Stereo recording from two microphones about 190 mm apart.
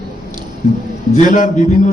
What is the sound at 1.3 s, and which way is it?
Speech, 40° left (ahead or behind).